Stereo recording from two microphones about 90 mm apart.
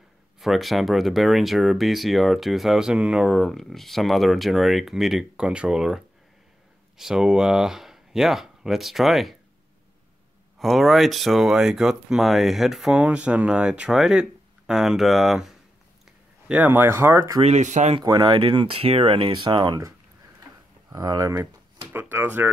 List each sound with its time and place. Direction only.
0.4 s speech: centre (ahead or behind)
10.6 s speech: centre (ahead or behind)
16.4 s speech: 20° right (ahead or behind)
18.0 s speech: 50° right (ahead or behind)
18.4 s speech: 75° right (ahead or behind); by 19.8 s 60° right (ahead or behind)
20.9 s speech: 45° right (ahead or behind)
21.9 s speech: 25° right (ahead or behind)